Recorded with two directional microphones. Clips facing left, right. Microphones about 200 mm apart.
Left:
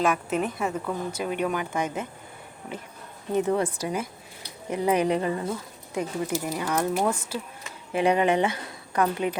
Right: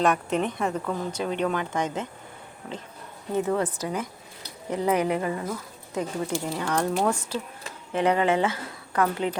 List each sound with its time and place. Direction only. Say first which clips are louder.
0.0 s speech: right 1 dB; 5° left (ahead or behind)
3.3 s speech: left 1 dB; 15° left (ahead or behind)